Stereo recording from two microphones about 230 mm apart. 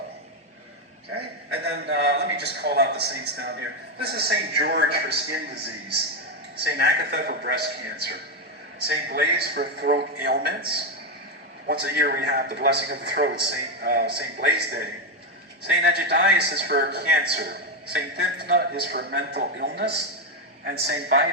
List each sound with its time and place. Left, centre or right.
1.6 s a man's voice: right